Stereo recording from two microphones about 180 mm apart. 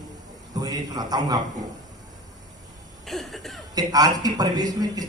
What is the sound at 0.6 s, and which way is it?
Speech, 20° right (ahead or behind).